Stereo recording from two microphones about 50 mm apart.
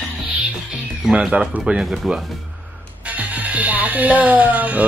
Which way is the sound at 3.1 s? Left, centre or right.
Right.